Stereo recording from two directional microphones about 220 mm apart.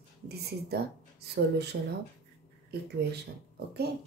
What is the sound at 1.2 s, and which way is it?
Speech, 50° right (ahead or behind).